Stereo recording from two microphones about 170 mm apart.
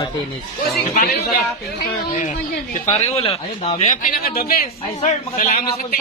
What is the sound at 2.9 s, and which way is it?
Speech, 35° left (ahead or behind).